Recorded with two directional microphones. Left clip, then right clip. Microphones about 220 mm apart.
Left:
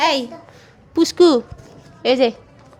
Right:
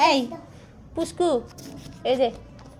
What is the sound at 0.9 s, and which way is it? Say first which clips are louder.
A woman's voice: left 10 dB; 40° left (ahead or behind).